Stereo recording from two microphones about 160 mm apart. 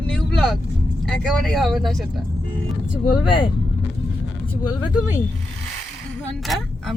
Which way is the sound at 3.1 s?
30° left (ahead or behind).